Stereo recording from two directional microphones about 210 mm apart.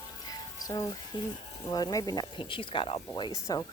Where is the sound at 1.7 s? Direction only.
20° left (ahead or behind).